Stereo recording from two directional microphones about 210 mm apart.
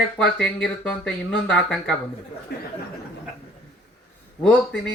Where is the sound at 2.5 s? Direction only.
50° left (ahead or behind).